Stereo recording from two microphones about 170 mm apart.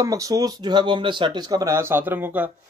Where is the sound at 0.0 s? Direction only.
20° right (ahead or behind).